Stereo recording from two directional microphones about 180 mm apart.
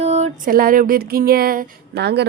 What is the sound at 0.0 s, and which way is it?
Music, 40° right (ahead or behind).